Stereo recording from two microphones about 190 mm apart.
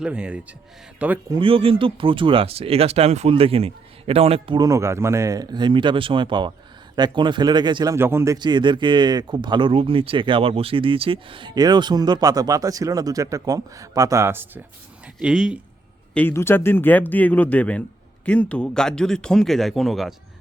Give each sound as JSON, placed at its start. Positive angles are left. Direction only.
{"t": 0.0, "sound": "speech", "side_deg": -5}
{"t": 1.3, "sound": "speech", "side_deg": -25}
{"t": 7.9, "sound": "speech", "side_deg": -15}
{"t": 16.1, "sound": "speech", "side_deg": 10}